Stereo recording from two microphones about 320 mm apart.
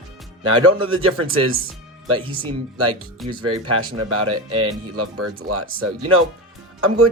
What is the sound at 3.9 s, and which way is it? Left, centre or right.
Speech, right.